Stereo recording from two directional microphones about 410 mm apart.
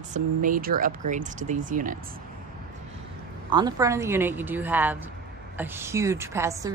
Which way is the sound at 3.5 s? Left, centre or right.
Centre.